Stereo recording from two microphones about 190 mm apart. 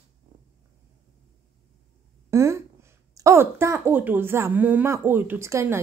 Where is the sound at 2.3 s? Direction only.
15° right (ahead or behind).